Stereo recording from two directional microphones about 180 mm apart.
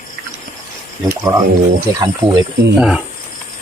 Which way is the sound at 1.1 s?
20° right (ahead or behind).